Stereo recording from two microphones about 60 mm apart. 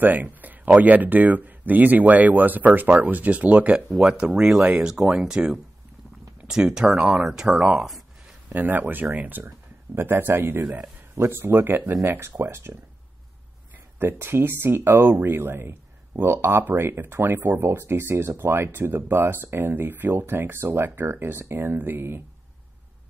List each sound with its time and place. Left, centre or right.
0.0 s speech: right
3.9 s speech: centre
8.5 s speech: right
13.9 s speech: right